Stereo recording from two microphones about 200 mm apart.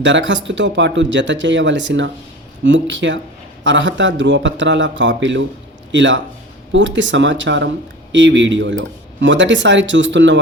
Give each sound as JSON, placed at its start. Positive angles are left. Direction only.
{"t": 0.0, "sound": "speech", "side_deg": -65}